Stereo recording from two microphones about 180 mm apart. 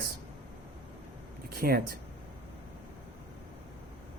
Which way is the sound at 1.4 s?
55° right (ahead or behind).